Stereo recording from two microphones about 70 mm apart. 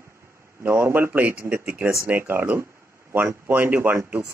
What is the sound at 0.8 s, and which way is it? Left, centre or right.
Speech, right.